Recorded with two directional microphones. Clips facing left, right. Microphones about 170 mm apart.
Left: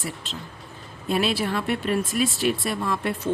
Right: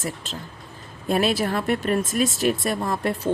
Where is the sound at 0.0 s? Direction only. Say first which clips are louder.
Right 2 dB; 40° right (ahead or behind).